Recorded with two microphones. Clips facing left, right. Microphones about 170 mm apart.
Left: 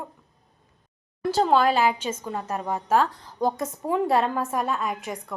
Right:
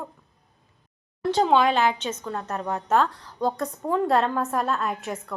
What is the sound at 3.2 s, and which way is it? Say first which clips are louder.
Speech: left 1 dB; 20° left (ahead or behind).